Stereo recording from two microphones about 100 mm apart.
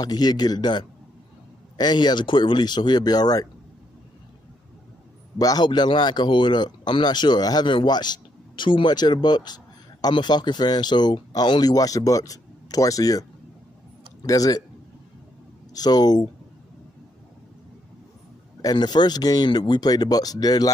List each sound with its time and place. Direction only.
0.0 s speech: 40° left (ahead or behind)
5.4 s speech: 40° left (ahead or behind)
15.7 s speech: 40° left (ahead or behind)
18.6 s speech: 45° left (ahead or behind)